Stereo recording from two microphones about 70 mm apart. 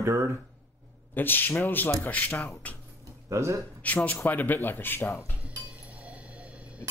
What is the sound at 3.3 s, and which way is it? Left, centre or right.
Speech, right.